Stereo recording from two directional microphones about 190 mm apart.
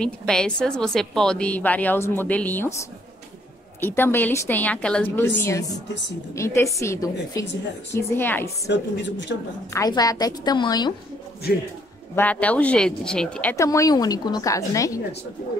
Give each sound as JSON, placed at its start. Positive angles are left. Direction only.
{"t": 0.0, "sound": "a woman's voice", "side_deg": 5}
{"t": 8.6, "sound": "a woman's voice", "side_deg": 70}
{"t": 9.7, "sound": "a woman's voice", "side_deg": 20}
{"t": 12.2, "sound": "a woman's voice", "side_deg": 5}